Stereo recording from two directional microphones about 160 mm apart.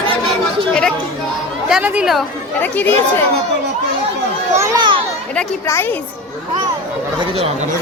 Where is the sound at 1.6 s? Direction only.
5° right (ahead or behind).